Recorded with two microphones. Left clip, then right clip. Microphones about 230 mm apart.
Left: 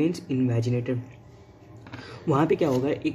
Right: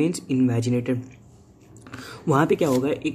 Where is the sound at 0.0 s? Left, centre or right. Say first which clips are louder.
Right 3 dB; centre.